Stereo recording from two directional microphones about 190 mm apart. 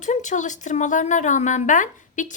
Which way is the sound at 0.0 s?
40° left (ahead or behind).